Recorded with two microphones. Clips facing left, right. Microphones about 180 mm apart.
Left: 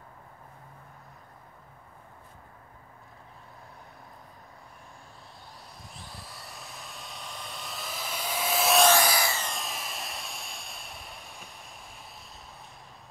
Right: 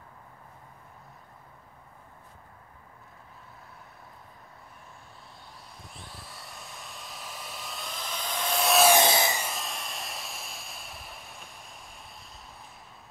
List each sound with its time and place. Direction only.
6.4 s vehicle: centre (ahead or behind)
8.9 s a sound: 20° right (ahead or behind)
9.4 s vehicle: centre (ahead or behind)